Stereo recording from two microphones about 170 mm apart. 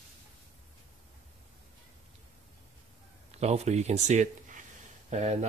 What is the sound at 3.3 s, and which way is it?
Speech, 40° right (ahead or behind).